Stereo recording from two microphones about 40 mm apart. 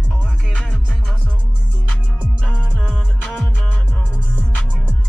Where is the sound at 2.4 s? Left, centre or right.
Left.